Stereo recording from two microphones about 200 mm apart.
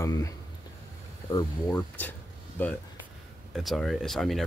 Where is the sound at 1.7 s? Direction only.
10° left (ahead or behind).